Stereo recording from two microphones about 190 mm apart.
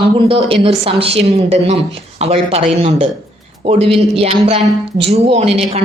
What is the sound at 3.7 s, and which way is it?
A woman's voice, 30° right (ahead or behind).